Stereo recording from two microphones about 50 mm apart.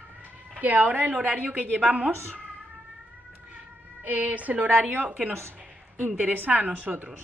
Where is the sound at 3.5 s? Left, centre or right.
Right.